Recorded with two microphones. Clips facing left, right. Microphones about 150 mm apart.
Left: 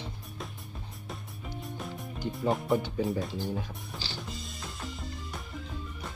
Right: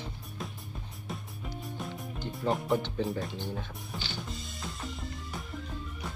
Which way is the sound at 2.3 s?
Centre (ahead or behind).